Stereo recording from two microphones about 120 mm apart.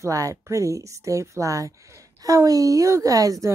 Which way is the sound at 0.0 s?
25° right (ahead or behind).